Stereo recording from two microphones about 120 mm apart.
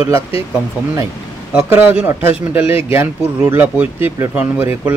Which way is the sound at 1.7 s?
15° right (ahead or behind).